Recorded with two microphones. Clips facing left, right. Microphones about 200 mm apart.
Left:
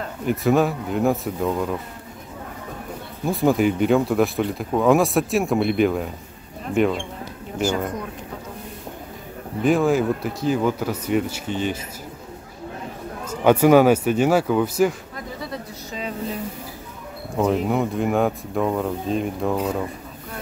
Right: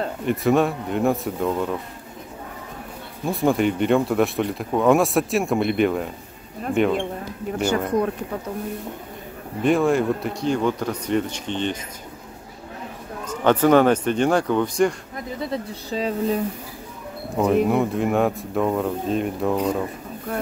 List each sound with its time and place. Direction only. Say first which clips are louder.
0.2 s speech: left 1 dB; centre (ahead or behind)
3.3 s speech: left 1 dB; centre (ahead or behind)
9.6 s speech: even; centre (ahead or behind)
13.2 s speech: left 2 dB; 10° left (ahead or behind)
15.4 s speech: right 4 dB; 30° right (ahead or behind)
17.4 s speech: right 2 dB; centre (ahead or behind)